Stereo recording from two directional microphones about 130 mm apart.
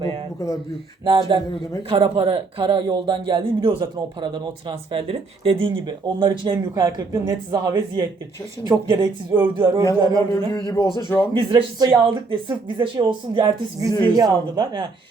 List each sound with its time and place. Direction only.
0.3 s speech: 25° left (ahead or behind)
1.0 s speech: 40° right (ahead or behind)
9.3 s speech: 15° right (ahead or behind); by 14.8 s 35° right (ahead or behind)